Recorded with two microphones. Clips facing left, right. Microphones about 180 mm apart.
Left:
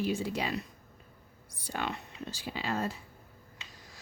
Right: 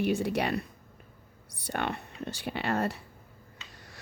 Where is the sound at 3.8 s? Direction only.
65° right (ahead or behind).